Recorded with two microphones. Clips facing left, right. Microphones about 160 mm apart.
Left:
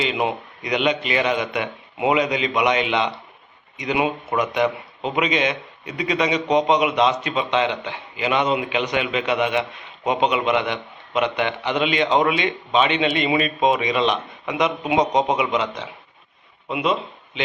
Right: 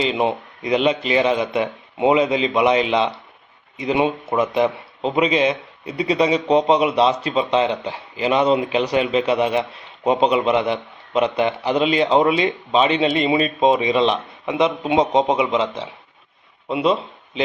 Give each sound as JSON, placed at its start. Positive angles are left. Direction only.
{"t": 0.0, "sound": "a man's voice", "side_deg": -30}